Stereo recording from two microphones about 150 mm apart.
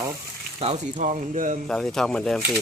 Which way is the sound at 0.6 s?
50° right (ahead or behind).